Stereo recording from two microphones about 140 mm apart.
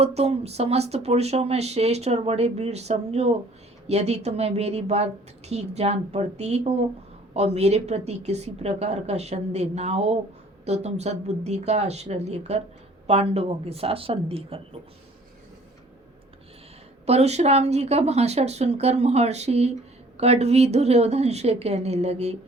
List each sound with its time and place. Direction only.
0.0 s speech: 50° right (ahead or behind)
17.1 s speech: 50° right (ahead or behind)